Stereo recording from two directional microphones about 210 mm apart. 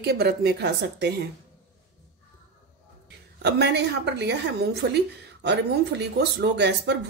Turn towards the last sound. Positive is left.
turn(degrees=-55)  # may be behind; listen again after turning